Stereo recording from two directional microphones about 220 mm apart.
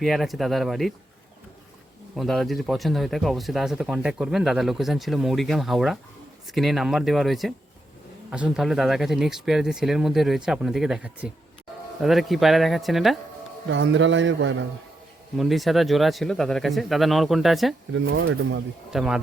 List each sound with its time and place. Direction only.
0.0 s speech: centre (ahead or behind)
2.1 s speech: centre (ahead or behind)
13.7 s a man's voice: 55° right (ahead or behind)
15.4 s speech: centre (ahead or behind)
18.0 s a man's voice: 60° right (ahead or behind)
18.9 s speech: 5° right (ahead or behind)